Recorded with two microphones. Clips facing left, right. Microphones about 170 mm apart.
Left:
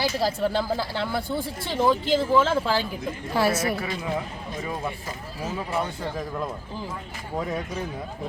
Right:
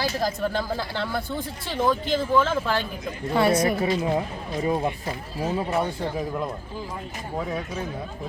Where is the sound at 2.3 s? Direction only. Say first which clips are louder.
Right 1 dB; 10° left (ahead or behind).